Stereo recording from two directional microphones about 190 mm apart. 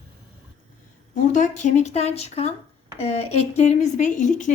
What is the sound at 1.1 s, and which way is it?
Speech, 40° left (ahead or behind).